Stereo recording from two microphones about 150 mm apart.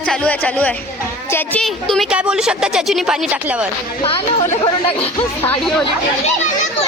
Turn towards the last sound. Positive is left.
turn(degrees=40)  # may be behind; listen again after turning